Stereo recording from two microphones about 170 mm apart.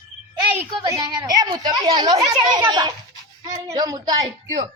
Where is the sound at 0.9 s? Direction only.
25° right (ahead or behind).